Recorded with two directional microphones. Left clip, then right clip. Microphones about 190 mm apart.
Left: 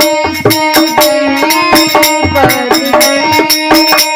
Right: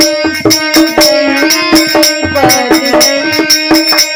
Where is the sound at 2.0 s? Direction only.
15° left (ahead or behind).